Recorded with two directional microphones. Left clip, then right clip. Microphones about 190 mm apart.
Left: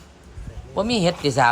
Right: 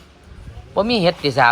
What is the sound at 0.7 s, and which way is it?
Speech, 5° left (ahead or behind).